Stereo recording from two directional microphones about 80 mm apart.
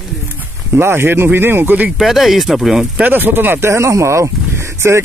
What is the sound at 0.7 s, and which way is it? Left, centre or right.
Speech, right.